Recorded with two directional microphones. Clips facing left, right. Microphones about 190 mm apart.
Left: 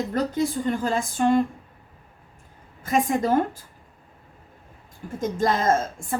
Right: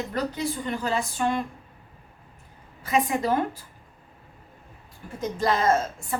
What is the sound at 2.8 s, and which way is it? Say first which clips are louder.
Speech: left 2 dB; 45° left (ahead or behind).